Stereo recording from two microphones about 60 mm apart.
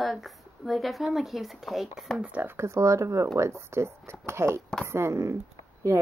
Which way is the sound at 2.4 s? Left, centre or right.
Right.